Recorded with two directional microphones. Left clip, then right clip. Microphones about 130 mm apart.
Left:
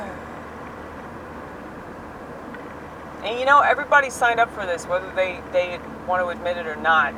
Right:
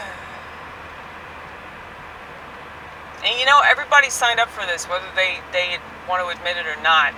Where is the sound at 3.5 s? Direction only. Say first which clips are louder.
Right 2 dB; 45° right (ahead or behind).